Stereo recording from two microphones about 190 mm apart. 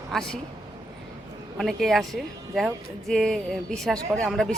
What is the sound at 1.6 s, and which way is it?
Speech, centre (ahead or behind).